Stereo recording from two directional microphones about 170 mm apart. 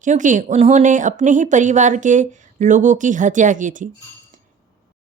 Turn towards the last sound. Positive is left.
turn(degrees=-50)  # may be behind; listen again after turning